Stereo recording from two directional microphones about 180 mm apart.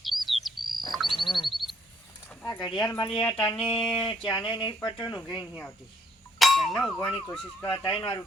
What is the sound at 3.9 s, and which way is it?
Speech, 25° left (ahead or behind).